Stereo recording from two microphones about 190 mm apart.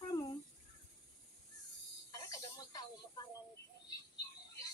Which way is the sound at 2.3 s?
20° left (ahead or behind).